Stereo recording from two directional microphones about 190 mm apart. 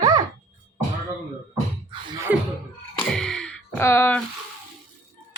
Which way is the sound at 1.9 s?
25° right (ahead or behind).